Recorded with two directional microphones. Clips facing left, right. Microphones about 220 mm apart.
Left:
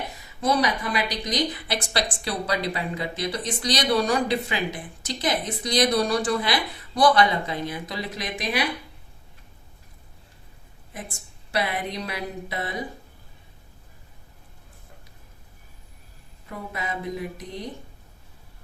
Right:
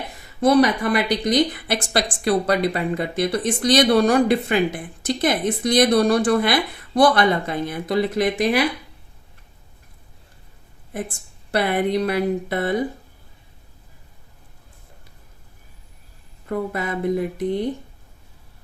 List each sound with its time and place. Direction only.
0.4 s a woman's voice: 60° right (ahead or behind)
11.5 s speech: 60° right (ahead or behind)
16.5 s speech: 55° right (ahead or behind)